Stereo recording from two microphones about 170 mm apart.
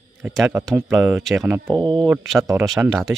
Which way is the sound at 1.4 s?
15° right (ahead or behind).